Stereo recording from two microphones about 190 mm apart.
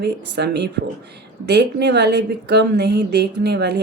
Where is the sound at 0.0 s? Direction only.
60° right (ahead or behind).